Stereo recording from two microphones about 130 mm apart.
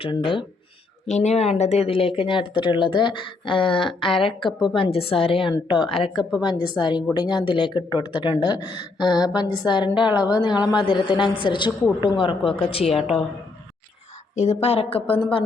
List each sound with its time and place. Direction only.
0.0 s speech: 40° left (ahead or behind)
1.0 s a woman's voice: 60° left (ahead or behind)
13.0 s a woman's voice: centre (ahead or behind)
14.3 s a woman's voice: 55° left (ahead or behind)